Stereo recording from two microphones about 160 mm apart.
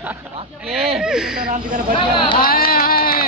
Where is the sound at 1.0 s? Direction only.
5° right (ahead or behind).